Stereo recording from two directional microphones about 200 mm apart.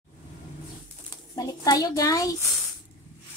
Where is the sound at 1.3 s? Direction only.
20° left (ahead or behind).